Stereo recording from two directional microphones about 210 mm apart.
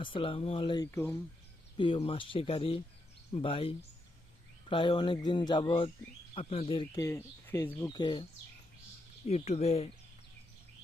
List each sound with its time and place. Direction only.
0.0 s speech: 25° left (ahead or behind)
0.9 s speech: 10° left (ahead or behind)
1.8 s speech: 25° left (ahead or behind)
9.2 s speech: 30° left (ahead or behind)